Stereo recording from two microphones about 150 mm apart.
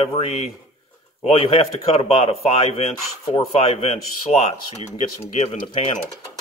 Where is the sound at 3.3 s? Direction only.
45° left (ahead or behind).